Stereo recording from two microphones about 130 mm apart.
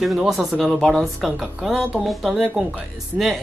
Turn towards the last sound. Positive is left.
turn(degrees=0)  # may be behind; listen again after turning